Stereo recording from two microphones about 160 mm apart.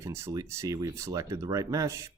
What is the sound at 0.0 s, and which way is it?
Speech, 20° right (ahead or behind).